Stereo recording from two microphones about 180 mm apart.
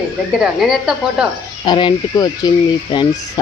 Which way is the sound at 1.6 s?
25° left (ahead or behind).